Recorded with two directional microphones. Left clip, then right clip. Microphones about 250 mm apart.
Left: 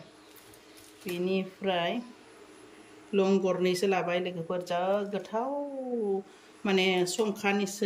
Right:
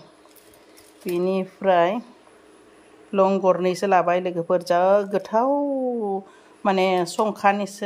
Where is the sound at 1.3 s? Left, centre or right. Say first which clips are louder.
Right 11 dB; centre.